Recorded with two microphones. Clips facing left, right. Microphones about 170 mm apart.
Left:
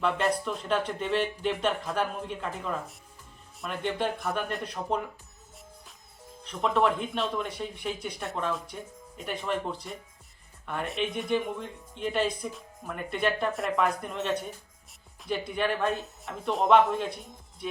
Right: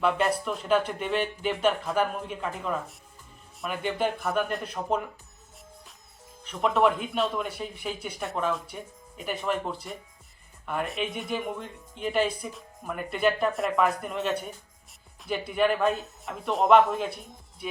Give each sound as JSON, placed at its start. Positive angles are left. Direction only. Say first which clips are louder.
{"t": 0.0, "sound": "speech", "louder": "right 2 dB", "side_deg": -5}
{"t": 6.4, "sound": "speech", "louder": "right 2 dB", "side_deg": -5}